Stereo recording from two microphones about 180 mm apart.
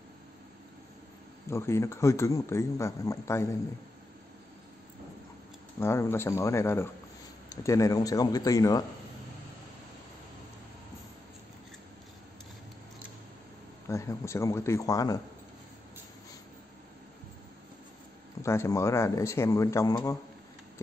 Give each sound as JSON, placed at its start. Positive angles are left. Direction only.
{"t": 1.5, "sound": "speech", "side_deg": 15}
{"t": 5.8, "sound": "speech", "side_deg": 15}
{"t": 13.8, "sound": "speech", "side_deg": 15}
{"t": 18.4, "sound": "speech", "side_deg": 15}